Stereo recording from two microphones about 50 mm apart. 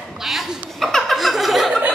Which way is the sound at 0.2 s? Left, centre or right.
Centre.